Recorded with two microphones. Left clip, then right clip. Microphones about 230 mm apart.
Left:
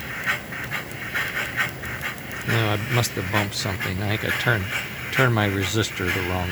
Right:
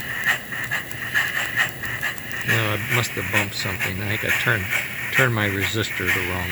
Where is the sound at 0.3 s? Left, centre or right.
Right.